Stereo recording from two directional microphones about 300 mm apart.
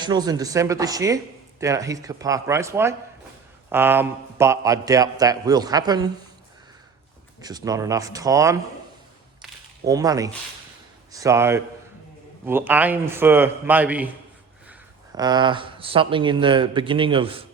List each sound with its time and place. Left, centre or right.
0.0 s speech: centre
7.4 s speech: centre
9.8 s a man's voice: centre